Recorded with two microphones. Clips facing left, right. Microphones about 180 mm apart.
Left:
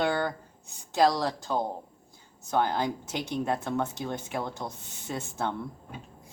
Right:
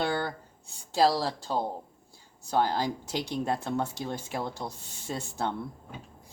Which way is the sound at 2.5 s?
35° right (ahead or behind).